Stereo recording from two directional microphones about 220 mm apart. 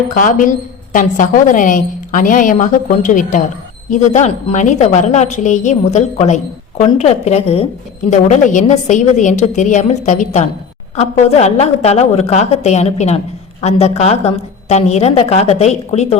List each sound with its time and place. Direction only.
0.1 s a woman's voice: 35° left (ahead or behind)